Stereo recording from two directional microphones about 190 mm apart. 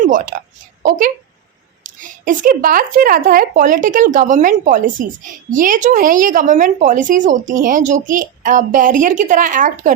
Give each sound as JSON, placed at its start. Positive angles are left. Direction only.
{"t": 0.3, "sound": "a woman's voice", "side_deg": -45}